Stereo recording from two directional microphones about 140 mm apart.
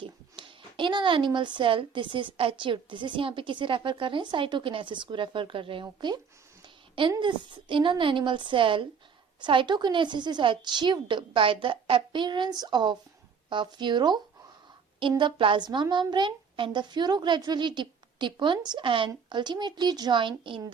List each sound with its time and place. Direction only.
0.0 s speech: 35° right (ahead or behind)
7.2 s speech: 35° right (ahead or behind)
15.2 s speech: 35° right (ahead or behind)